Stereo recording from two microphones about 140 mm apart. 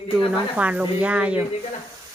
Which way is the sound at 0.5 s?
10° right (ahead or behind).